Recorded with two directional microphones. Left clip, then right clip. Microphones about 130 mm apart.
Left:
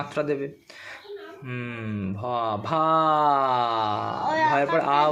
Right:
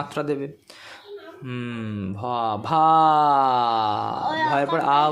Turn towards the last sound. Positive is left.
turn(degrees=-35)  # may be behind; listen again after turning